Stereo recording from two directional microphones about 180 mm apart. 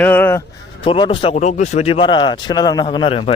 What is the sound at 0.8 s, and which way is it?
Speech, 30° left (ahead or behind).